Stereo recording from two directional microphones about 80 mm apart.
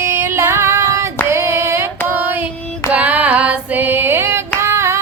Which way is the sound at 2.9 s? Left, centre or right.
Centre.